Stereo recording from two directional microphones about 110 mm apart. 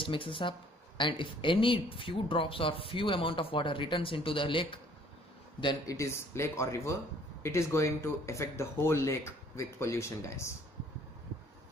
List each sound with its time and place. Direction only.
0.0 s speech: 50° left (ahead or behind)
5.9 s speech: 25° left (ahead or behind)